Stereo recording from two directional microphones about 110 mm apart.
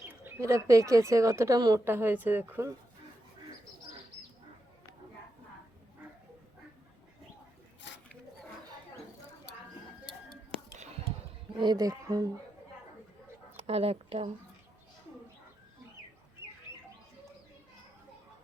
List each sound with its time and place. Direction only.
0.0 s bird: 15° right (ahead or behind)
0.3 s speech: 30° right (ahead or behind)
1.8 s speech: 20° right (ahead or behind)
11.6 s speech: 35° right (ahead or behind)
13.6 s a woman's voice: 65° right (ahead or behind)